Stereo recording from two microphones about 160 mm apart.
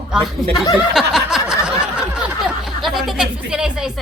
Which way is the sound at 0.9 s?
Centre (ahead or behind).